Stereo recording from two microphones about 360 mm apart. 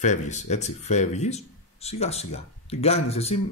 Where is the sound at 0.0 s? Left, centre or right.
Centre.